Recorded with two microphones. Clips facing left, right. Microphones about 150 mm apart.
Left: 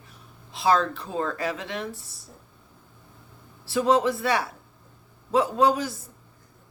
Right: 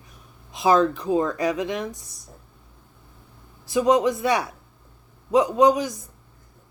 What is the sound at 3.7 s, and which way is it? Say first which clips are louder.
Speech: right 2 dB; 15° right (ahead or behind).